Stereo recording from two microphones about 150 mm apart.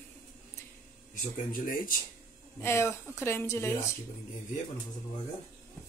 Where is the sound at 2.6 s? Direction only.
15° left (ahead or behind).